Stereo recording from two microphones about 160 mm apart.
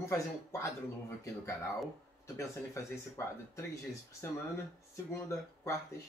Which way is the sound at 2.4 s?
20° left (ahead or behind).